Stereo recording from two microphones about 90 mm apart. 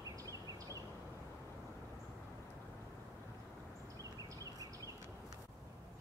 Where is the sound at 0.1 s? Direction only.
40° right (ahead or behind).